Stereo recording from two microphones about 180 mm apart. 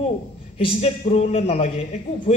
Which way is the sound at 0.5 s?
35° left (ahead or behind).